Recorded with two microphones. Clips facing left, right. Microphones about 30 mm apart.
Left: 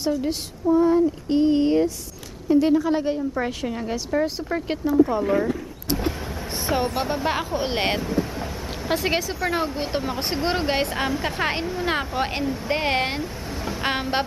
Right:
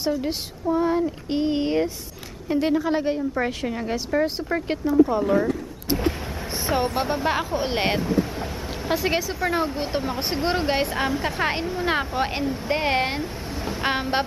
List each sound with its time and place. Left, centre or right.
0.0 s a woman's voice: centre
6.5 s a sound: centre
7.2 s a woman's voice: centre
13.5 s vehicle: centre